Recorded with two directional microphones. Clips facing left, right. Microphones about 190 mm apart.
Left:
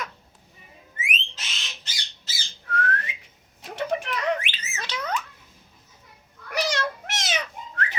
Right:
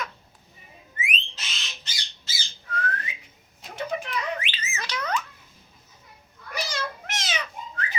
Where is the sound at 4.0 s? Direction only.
85° left.